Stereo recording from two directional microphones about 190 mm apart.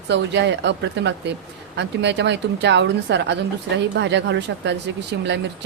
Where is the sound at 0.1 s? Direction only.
65° right (ahead or behind).